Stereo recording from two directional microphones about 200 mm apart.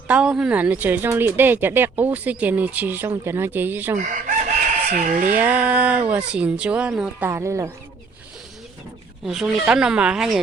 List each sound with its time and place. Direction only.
0.1 s speech: 5° right (ahead or behind)
3.9 s chicken: 40° right (ahead or behind)
4.9 s speech: 40° right (ahead or behind)
5.3 s speech: 10° right (ahead or behind)
9.2 s speech: centre (ahead or behind)